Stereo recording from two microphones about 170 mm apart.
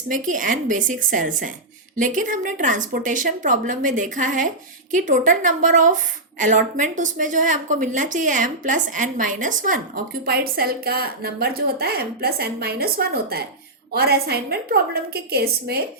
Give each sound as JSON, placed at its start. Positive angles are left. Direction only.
{"t": 0.1, "sound": "a woman's voice", "side_deg": -50}